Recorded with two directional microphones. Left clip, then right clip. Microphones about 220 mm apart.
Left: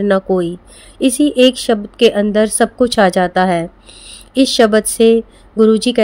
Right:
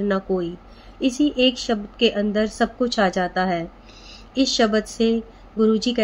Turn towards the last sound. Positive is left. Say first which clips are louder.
# left 8 dB
turn(degrees=50)  # may be behind; listen again after turning